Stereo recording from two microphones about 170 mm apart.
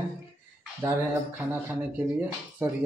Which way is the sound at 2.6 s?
15° right (ahead or behind).